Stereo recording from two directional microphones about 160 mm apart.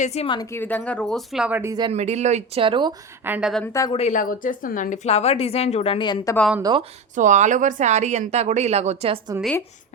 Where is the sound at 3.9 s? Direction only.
45° left (ahead or behind); by 6.4 s 25° left (ahead or behind).